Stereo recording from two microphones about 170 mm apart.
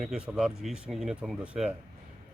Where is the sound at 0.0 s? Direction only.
5° right (ahead or behind).